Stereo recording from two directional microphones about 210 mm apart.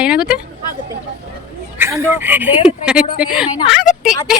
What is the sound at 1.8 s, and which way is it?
A woman's voice, 10° right (ahead or behind).